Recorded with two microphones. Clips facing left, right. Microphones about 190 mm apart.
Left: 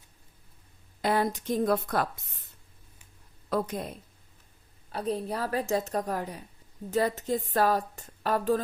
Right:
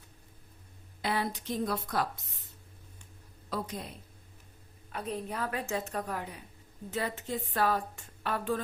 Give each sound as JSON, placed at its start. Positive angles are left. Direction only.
{"t": 1.0, "sound": "speech", "side_deg": 45}
{"t": 3.5, "sound": "speech", "side_deg": 50}
{"t": 4.9, "sound": "a woman's voice", "side_deg": 35}